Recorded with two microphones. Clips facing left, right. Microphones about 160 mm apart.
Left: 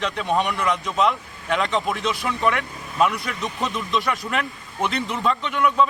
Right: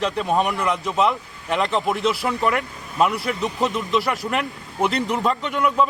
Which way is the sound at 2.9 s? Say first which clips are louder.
Right 1 dB; centre (ahead or behind).